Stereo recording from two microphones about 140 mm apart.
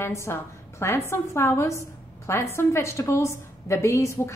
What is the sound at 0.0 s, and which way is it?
A woman's voice, 20° left (ahead or behind).